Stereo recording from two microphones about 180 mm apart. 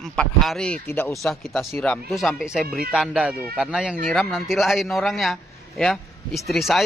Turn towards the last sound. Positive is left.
turn(degrees=0)  # may be behind; listen again after turning